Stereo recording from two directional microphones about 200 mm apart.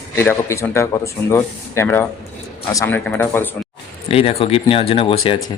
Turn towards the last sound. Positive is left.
turn(degrees=25)  # may be behind; listen again after turning